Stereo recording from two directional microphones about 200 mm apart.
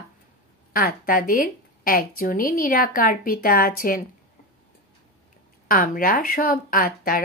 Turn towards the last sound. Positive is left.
turn(degrees=45)  # may be behind; listen again after turning